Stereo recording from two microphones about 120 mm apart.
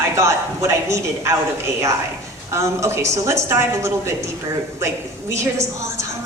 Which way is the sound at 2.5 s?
25° right (ahead or behind).